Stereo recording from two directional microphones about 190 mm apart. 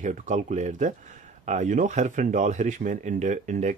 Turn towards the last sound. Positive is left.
turn(degrees=-40)  # may be behind; listen again after turning